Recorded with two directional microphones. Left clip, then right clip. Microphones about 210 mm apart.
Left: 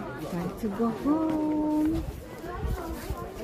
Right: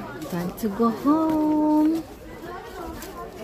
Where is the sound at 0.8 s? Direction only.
30° right (ahead or behind).